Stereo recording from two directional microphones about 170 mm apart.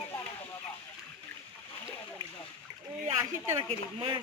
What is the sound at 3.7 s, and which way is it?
Speech, 30° right (ahead or behind).